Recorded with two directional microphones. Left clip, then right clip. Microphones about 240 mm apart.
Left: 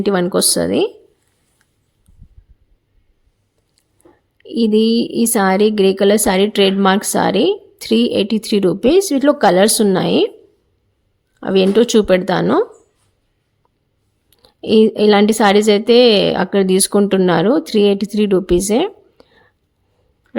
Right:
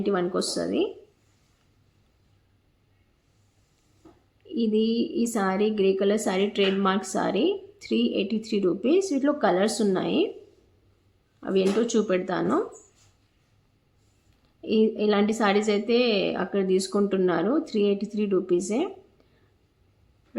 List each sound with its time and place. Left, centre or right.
0.0 s a woman's voice: left
4.4 s a woman's voice: left
11.3 s a woman's voice: left
14.4 s a woman's voice: left